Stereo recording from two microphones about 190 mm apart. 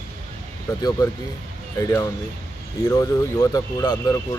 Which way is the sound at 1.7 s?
15° left (ahead or behind).